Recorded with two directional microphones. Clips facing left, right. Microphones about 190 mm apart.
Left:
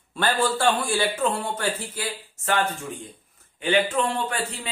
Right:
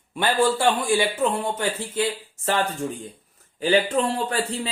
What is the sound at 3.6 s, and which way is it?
Speech, 35° right (ahead or behind).